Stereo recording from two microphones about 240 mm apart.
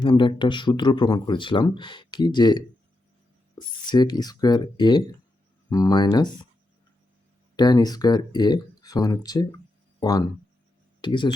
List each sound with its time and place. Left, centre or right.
0.0 s speech: left
3.8 s speech: centre
7.5 s speech: centre